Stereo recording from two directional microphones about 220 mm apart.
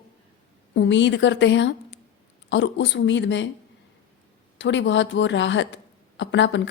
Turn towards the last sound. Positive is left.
turn(degrees=55)  # may be behind; listen again after turning